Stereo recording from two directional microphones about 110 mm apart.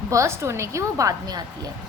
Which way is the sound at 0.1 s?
25° right (ahead or behind).